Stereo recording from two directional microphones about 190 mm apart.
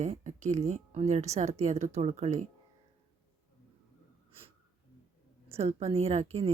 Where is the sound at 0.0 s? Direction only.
40° right (ahead or behind).